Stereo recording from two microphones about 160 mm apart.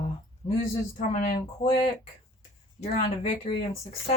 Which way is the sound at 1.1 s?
45° left (ahead or behind).